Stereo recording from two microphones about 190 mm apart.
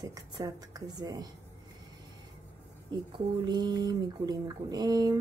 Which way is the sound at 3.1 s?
25° right (ahead or behind).